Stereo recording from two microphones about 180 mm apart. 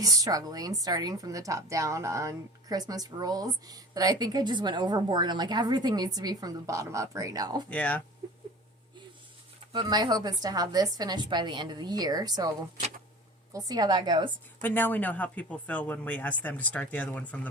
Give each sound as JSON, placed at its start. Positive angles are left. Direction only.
{"t": 0.0, "sound": "a woman's voice", "side_deg": -20}
{"t": 7.7, "sound": "speech", "side_deg": 10}
{"t": 9.7, "sound": "a woman's voice", "side_deg": -20}
{"t": 14.6, "sound": "speech", "side_deg": 10}